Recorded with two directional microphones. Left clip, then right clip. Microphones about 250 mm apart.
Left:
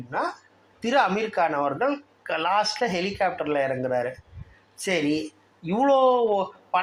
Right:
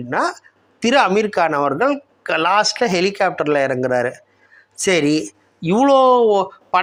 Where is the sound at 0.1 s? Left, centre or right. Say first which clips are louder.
Right 8 dB; right.